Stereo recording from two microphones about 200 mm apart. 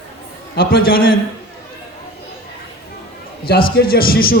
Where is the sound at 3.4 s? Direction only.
50° left (ahead or behind).